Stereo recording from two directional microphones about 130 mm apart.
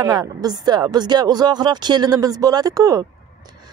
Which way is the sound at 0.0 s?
30° right (ahead or behind).